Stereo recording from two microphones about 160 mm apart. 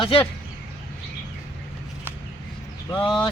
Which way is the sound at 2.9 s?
30° left (ahead or behind).